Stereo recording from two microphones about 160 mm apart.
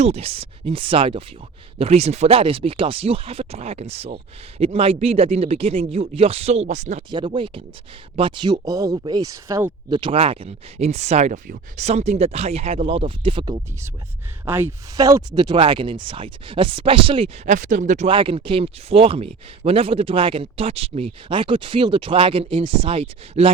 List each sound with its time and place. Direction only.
0.0 s speech: 40° right (ahead or behind)
7.1 s speech: 30° right (ahead or behind)
8.6 s speech: 20° right (ahead or behind)
9.9 s speech: 35° right (ahead or behind)
14.4 s speech: 15° right (ahead or behind); by 18.1 s 50° right (ahead or behind)
18.1 s speech: 30° right (ahead or behind)